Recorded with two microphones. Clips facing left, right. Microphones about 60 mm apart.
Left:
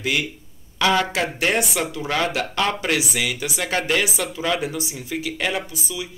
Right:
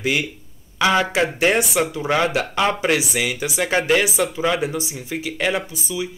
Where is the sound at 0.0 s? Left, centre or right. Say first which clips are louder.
Right 2 dB; centre.